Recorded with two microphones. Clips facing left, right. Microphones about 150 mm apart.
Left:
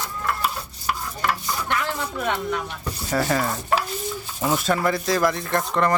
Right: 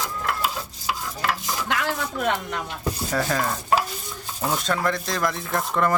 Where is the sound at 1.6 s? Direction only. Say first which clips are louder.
Even; 90° right.